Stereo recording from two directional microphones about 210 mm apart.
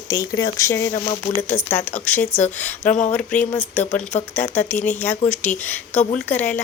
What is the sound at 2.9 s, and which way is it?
Speech, 35° left (ahead or behind).